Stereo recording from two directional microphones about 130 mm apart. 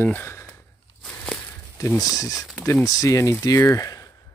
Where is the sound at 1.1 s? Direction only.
5° left (ahead or behind).